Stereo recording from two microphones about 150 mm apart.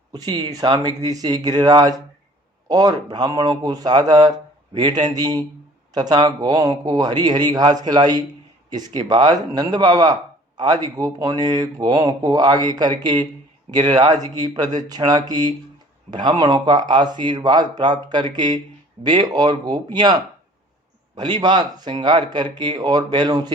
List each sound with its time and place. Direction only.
0.1 s speech: 30° right (ahead or behind)